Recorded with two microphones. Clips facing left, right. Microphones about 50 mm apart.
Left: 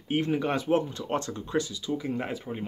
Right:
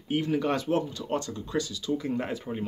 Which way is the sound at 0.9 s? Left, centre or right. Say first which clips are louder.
Left 1 dB; left.